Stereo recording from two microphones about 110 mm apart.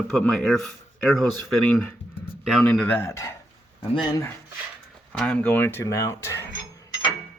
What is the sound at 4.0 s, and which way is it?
Speech, 45° left (ahead or behind).